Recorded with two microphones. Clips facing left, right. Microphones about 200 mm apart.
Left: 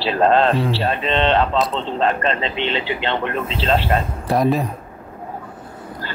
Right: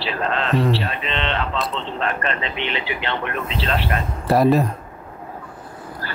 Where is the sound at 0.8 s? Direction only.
35° left (ahead or behind).